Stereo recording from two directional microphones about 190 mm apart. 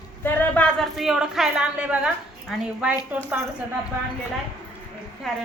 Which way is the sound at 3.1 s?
10° right (ahead or behind).